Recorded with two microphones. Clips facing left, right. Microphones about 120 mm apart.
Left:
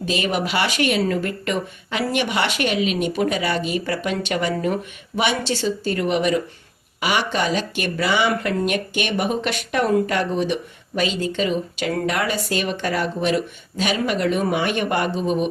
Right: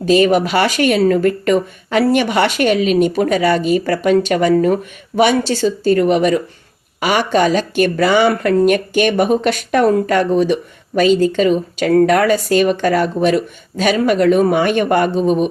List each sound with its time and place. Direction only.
0.0 s speech: 45° right (ahead or behind)